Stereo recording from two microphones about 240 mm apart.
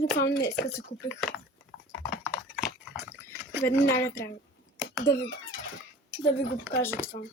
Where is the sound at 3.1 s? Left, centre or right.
Centre.